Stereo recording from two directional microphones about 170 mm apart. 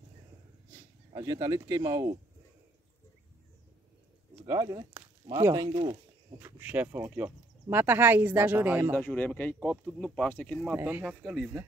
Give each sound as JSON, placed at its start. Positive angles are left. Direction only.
{"t": 1.1, "sound": "speech", "side_deg": -20}
{"t": 4.5, "sound": "speech", "side_deg": -20}
{"t": 5.7, "sound": "speech", "side_deg": -30}
{"t": 6.4, "sound": "speech", "side_deg": -10}
{"t": 8.9, "sound": "speech", "side_deg": 10}
{"t": 10.8, "sound": "speech", "side_deg": -10}